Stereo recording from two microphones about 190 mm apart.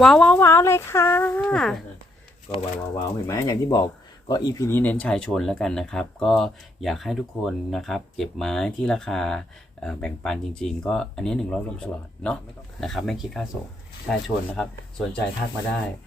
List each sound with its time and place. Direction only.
0.0 s speech: 5° left (ahead or behind)
2.8 s speech: 15° left (ahead or behind)